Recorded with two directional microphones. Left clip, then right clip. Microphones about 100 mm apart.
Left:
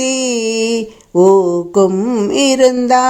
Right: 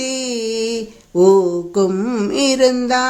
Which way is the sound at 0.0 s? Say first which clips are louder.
Left 6 dB; 40° left (ahead or behind).